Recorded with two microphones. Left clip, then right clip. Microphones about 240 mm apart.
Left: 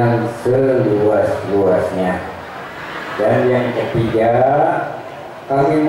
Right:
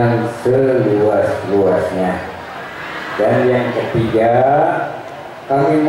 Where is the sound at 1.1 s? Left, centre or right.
Centre.